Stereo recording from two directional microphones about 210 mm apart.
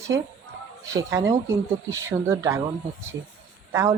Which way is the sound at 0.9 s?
15° right (ahead or behind).